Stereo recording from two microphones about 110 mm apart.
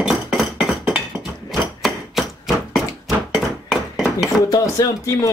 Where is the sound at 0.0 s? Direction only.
5° right (ahead or behind).